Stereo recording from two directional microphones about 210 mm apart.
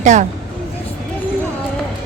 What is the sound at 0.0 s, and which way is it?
Speech, 35° right (ahead or behind).